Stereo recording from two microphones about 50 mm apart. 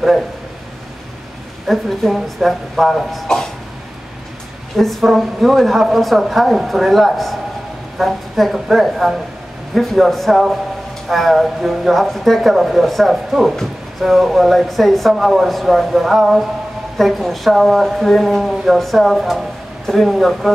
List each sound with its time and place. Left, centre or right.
1.7 s speech: centre
4.7 s a woman's voice: centre